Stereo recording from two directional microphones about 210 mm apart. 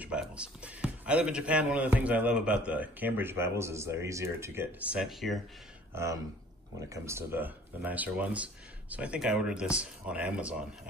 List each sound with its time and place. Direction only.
0.0 s a man's voice: 5° right (ahead or behind)
6.9 s a man's voice: 10° right (ahead or behind)